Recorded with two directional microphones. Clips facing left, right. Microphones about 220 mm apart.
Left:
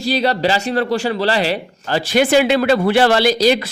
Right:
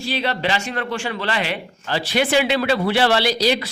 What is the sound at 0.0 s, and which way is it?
A man's voice, 40° left (ahead or behind).